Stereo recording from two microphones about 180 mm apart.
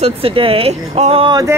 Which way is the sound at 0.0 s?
30° right (ahead or behind).